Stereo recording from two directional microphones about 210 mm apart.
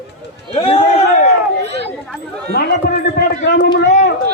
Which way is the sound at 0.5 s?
30° left (ahead or behind).